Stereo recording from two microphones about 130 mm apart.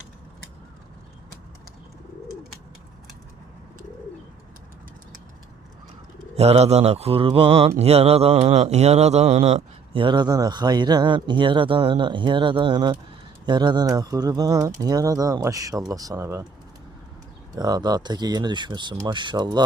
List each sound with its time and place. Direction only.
6.3 s speech: 55° right (ahead or behind)
10.0 s speech: 35° right (ahead or behind)
17.5 s speech: 30° right (ahead or behind)